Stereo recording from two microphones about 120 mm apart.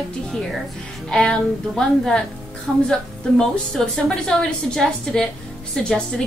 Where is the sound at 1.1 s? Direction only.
5° left (ahead or behind).